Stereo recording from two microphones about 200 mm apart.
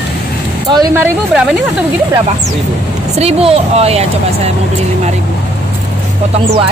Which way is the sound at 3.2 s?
30° right (ahead or behind).